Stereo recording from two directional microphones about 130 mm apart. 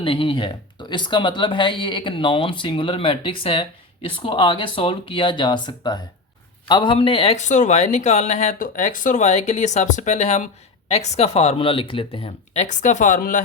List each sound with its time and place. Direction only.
0.0 s speech: 40° left (ahead or behind)
12.5 s speech: 70° left (ahead or behind); by 13.4 s 85° left